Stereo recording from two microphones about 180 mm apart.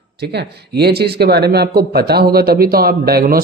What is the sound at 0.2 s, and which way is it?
Speech, 65° right (ahead or behind).